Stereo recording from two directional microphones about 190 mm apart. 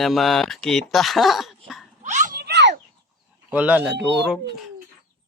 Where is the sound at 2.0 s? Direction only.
40° right (ahead or behind).